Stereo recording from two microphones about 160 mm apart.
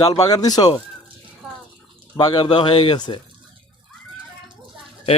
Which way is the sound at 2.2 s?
25° left (ahead or behind).